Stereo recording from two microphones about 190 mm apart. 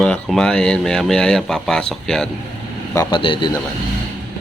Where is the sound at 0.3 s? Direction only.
5° left (ahead or behind).